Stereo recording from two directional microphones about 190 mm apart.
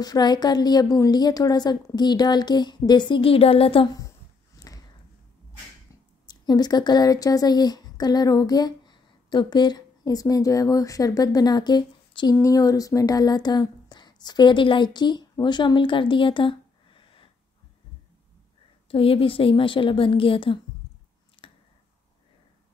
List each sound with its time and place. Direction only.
0.0 s a woman's voice: 20° left (ahead or behind)
6.2 s speech: 20° left (ahead or behind)
18.9 s a woman's voice: 30° left (ahead or behind)
21.4 s a sound: 30° left (ahead or behind)